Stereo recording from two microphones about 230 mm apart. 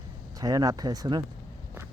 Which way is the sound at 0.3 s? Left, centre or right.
Centre.